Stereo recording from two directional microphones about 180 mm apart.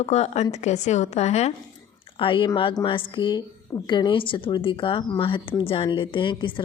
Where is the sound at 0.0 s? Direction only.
40° left (ahead or behind).